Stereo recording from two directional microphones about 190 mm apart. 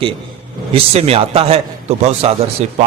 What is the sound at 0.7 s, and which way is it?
A man's voice, 30° right (ahead or behind).